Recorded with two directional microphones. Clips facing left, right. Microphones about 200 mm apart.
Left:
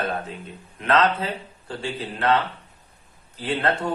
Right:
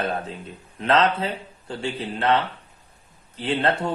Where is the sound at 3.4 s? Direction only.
30° right (ahead or behind).